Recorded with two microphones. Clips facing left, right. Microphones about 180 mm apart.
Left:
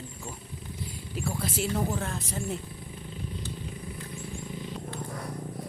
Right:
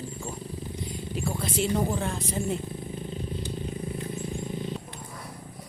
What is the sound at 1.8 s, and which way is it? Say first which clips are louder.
Speech: right 3 dB; centre (ahead or behind).